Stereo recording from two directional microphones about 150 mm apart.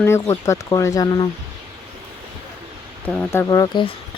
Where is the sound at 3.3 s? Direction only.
20° left (ahead or behind).